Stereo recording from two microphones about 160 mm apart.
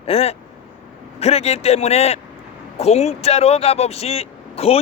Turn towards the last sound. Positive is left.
turn(degrees=40)  # may be behind; listen again after turning